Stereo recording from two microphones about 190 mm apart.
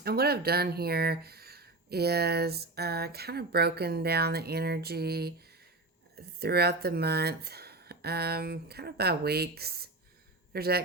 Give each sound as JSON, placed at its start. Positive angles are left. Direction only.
{"t": 0.0, "sound": "speech", "side_deg": -55}